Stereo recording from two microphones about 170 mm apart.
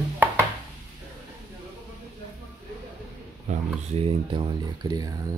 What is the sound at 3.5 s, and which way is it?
Speech, 40° right (ahead or behind).